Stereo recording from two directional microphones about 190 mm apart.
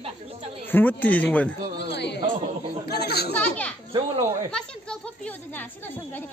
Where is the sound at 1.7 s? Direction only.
60° left (ahead or behind).